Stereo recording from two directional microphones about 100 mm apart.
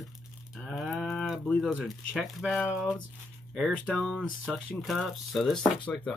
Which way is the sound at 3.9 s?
Centre (ahead or behind).